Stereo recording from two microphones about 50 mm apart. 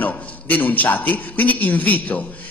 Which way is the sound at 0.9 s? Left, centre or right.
Left.